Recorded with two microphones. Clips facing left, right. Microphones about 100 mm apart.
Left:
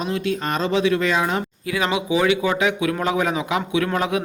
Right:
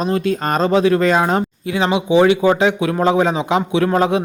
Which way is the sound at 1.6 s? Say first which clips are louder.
Right 5 dB; 25° right (ahead or behind).